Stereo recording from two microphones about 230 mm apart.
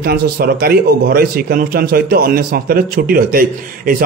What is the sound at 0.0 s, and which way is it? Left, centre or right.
Speech, right.